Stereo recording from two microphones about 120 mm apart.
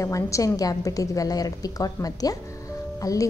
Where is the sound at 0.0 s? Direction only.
25° left (ahead or behind).